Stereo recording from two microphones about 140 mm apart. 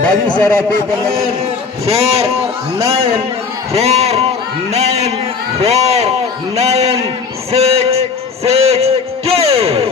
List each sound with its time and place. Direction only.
0.0 s a man's voice: 10° left (ahead or behind)
1.9 s a man's voice: 50° right (ahead or behind)
2.7 s a man's voice: 20° right (ahead or behind)
3.7 s a man's voice: 50° right (ahead or behind)
7.5 s a sound: 45° right (ahead or behind)